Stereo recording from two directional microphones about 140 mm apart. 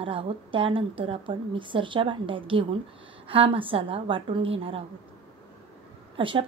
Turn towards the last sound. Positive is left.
turn(degrees=-40)  # may be behind; listen again after turning